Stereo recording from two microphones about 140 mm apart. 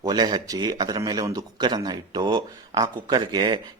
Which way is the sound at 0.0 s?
30° right (ahead or behind).